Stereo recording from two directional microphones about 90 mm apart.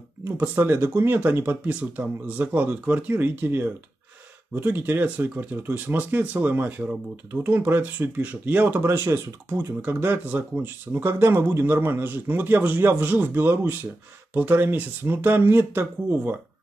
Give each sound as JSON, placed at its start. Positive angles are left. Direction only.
{"t": 0.4, "sound": "speech", "side_deg": -25}